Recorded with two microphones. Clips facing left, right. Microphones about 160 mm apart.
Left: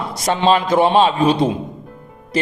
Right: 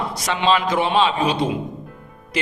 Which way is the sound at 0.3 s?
45° left (ahead or behind).